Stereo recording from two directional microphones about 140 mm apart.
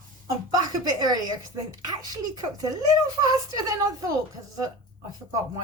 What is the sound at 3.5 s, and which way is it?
Speech, 25° right (ahead or behind).